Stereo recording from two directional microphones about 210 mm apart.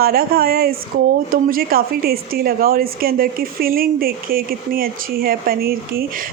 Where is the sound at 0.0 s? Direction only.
45° right (ahead or behind).